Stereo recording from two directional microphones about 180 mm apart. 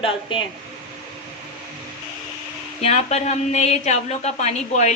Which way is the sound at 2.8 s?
35° left (ahead or behind).